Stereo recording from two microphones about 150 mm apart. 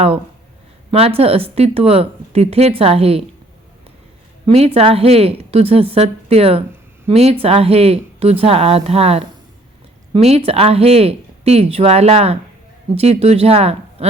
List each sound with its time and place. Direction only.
0.9 s speech: 40° right (ahead or behind)
4.4 s speech: 45° right (ahead or behind)